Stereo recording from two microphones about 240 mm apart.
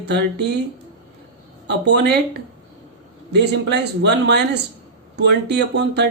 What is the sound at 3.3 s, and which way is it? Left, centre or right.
Speech, right.